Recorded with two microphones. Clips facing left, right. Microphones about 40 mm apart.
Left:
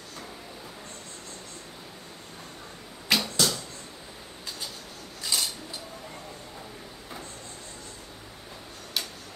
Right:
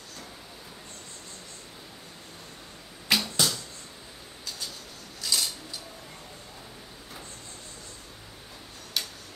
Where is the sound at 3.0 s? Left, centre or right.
Centre.